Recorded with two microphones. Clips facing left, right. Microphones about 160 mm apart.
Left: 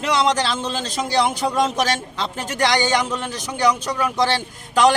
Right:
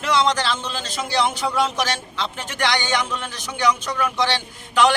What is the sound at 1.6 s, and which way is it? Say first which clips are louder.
A man's voice: left 3 dB; 45° left (ahead or behind).